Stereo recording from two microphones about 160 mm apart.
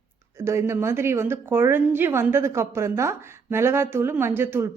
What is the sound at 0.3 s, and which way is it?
A woman's voice, 15° right (ahead or behind).